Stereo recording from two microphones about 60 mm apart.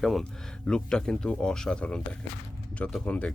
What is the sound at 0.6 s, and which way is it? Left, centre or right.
Speech, centre.